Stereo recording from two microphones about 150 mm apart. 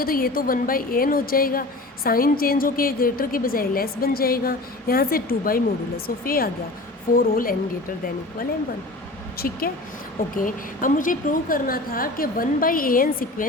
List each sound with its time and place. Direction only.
0.0 s a woman's voice: 75° left (ahead or behind)
7.1 s a woman's voice: 70° left (ahead or behind)
9.4 s a woman's voice: 75° left (ahead or behind)
10.3 s a woman's voice: 65° left (ahead or behind)